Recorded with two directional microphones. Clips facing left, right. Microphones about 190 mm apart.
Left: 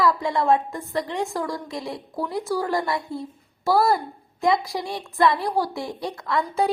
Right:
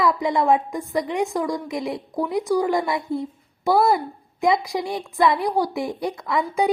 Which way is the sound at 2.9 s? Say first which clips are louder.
Right 3 dB; 20° right (ahead or behind).